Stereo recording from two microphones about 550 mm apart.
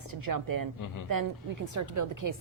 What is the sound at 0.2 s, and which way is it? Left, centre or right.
A woman's voice, right.